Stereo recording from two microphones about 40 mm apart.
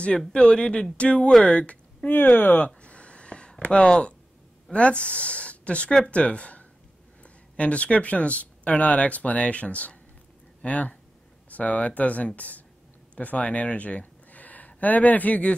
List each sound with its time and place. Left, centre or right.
0.3 s speech: left
2.0 s speech: left
2.6 s a sound: left
3.7 s speech: left
13.5 s a sound: left
14.8 s speech: left